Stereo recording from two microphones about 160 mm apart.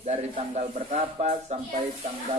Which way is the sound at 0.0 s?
45° right (ahead or behind).